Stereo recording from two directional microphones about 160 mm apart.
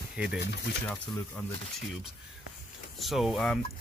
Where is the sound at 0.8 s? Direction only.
10° left (ahead or behind).